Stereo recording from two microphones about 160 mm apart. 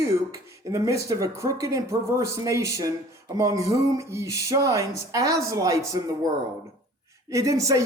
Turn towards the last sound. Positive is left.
turn(degrees=-20)  # may be behind; listen again after turning